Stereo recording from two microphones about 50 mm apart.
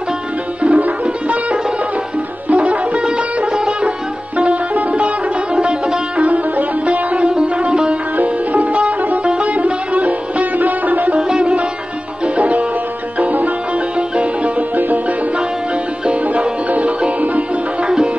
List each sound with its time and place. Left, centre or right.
0.6 s music: right
2.5 s sitar: right
4.4 s music: right
6.2 s sitar: right
8.2 s music: right
11.1 s sitar: centre
12.4 s music: right
13.9 s sitar: right
16.1 s music: right
17.8 s music: centre